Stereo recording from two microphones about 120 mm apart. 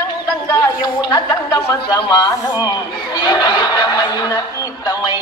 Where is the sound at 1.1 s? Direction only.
35° left (ahead or behind).